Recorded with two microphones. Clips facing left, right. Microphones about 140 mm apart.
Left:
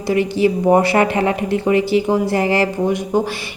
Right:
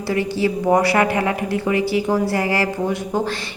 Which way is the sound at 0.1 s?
20° left (ahead or behind).